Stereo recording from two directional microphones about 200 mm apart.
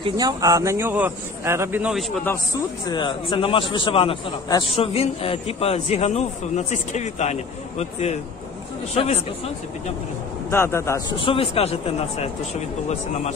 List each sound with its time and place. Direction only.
0.0 s a man's voice: 20° right (ahead or behind)
2.9 s a man's voice: 25° left (ahead or behind)
10.5 s a man's voice: 15° left (ahead or behind)
11.1 s a man's voice: 25° left (ahead or behind)